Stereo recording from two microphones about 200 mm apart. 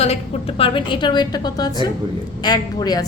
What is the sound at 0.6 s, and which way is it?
A woman's voice, 25° left (ahead or behind).